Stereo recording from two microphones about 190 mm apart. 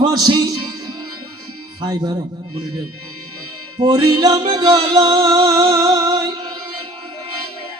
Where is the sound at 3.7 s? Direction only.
25° right (ahead or behind).